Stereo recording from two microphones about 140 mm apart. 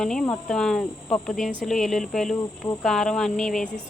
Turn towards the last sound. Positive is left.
turn(degrees=5)  # may be behind; listen again after turning